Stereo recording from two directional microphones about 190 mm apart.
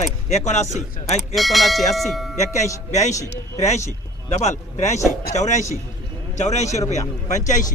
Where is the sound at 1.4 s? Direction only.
Centre (ahead or behind).